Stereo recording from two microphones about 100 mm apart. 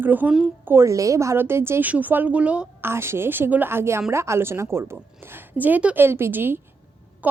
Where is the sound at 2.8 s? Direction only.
25° right (ahead or behind).